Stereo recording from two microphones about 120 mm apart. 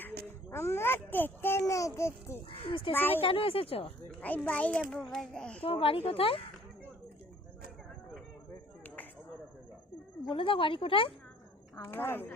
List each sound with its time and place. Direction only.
0.0 s a child's voice: 20° left (ahead or behind)
2.6 s speech: 50° left (ahead or behind)
2.9 s a child's voice: 15° left (ahead or behind)
3.2 s speech: 50° left (ahead or behind)
4.4 s a child's voice: 10° left (ahead or behind)
5.6 s speech: 50° left (ahead or behind)
10.2 s speech: 45° left (ahead or behind)
11.8 s a child's voice: 15° left (ahead or behind)